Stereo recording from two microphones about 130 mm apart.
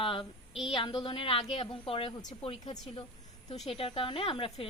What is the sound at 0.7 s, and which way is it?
A woman's voice, 40° left (ahead or behind).